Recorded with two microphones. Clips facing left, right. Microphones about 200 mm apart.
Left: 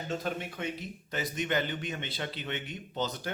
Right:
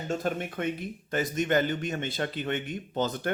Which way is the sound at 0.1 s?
50° right (ahead or behind).